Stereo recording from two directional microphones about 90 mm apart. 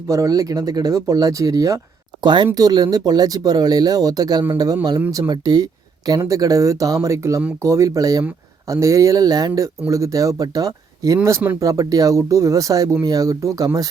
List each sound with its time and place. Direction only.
0.1 s speech: 40° right (ahead or behind)
2.2 s speech: 55° right (ahead or behind)
2.6 s speech: 45° right (ahead or behind)
11.2 s speech: 25° right (ahead or behind)
11.6 s speech: 40° right (ahead or behind)